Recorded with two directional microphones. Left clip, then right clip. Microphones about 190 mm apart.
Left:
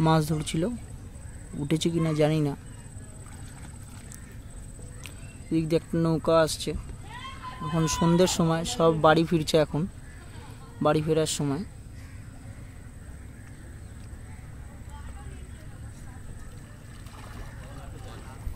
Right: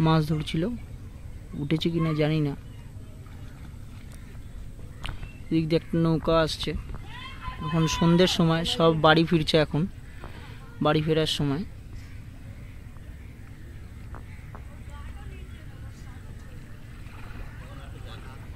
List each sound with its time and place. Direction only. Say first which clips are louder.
0.0 s speech: left 1 dB; 15° left (ahead or behind)
5.0 s speech: right 7 dB; 5° left (ahead or behind)